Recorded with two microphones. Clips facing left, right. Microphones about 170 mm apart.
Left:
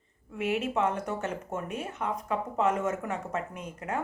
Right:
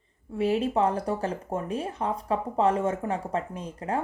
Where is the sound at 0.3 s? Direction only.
35° right (ahead or behind).